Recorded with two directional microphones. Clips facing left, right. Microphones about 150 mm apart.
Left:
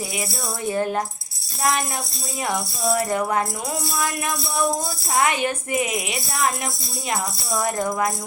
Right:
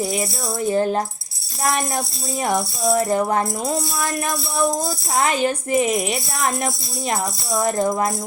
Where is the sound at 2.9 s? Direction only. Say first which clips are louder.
Right 3 dB; 30° right (ahead or behind).